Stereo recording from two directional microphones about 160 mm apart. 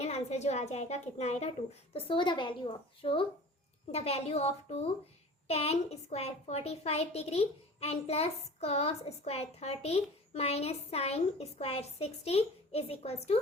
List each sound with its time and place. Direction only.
0.0 s a woman's voice: 40° left (ahead or behind)